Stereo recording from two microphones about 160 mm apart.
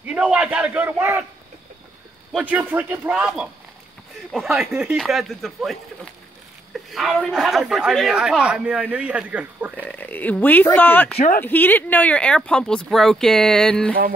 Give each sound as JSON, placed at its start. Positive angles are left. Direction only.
{"t": 0.0, "sound": "a sound", "side_deg": -10}
{"t": 2.3, "sound": "speech", "side_deg": -10}
{"t": 9.8, "sound": "speech", "side_deg": 10}
{"t": 11.1, "sound": "speech", "side_deg": 55}
{"t": 11.4, "sound": "speech", "side_deg": 10}